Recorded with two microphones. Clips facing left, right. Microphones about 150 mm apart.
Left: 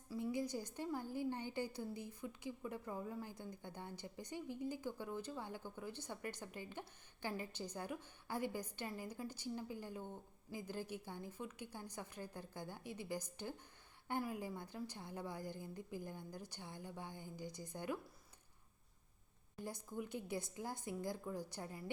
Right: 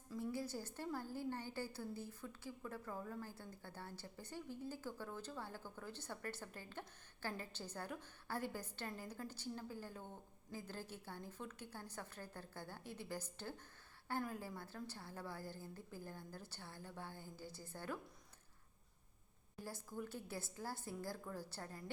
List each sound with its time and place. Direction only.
0.1 s a woman's voice: 15° left (ahead or behind)
19.6 s a woman's voice: 15° left (ahead or behind)